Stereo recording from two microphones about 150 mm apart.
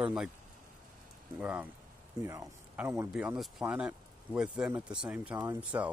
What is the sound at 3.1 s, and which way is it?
Speech, 5° right (ahead or behind).